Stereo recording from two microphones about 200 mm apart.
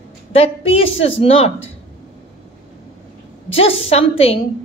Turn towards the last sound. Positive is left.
turn(degrees=30)  # may be behind; listen again after turning